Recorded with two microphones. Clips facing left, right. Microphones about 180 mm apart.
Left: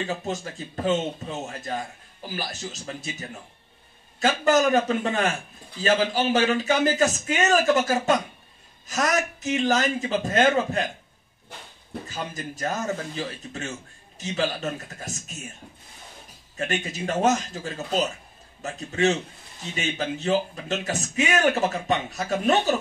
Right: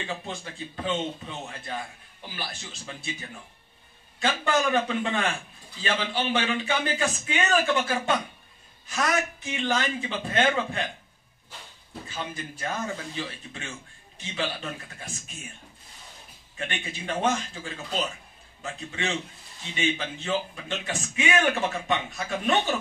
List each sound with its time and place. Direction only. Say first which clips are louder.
0.0 s a man's voice: left 6 dB; 45° left (ahead or behind)
12.1 s a man's voice: left 1 dB; 40° left (ahead or behind)
16.5 s a man's voice: left 6 dB; 40° left (ahead or behind)